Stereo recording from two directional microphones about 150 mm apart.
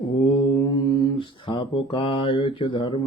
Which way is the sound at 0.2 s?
30° left (ahead or behind).